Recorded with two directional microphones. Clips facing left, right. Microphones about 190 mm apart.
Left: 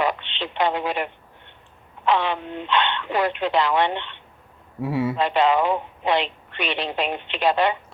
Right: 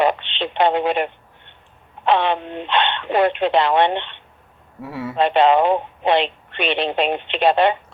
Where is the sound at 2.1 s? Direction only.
65° right (ahead or behind).